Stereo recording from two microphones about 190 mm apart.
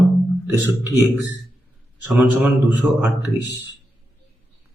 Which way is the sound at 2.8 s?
10° right (ahead or behind).